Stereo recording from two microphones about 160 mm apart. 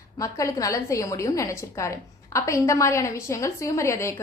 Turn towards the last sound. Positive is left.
turn(degrees=20)  # may be behind; listen again after turning